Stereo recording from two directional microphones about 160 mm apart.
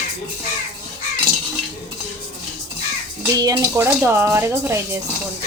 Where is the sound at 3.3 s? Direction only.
25° right (ahead or behind).